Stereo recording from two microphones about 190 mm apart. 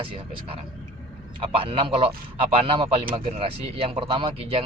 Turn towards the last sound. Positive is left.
turn(degrees=-30)  # may be behind; listen again after turning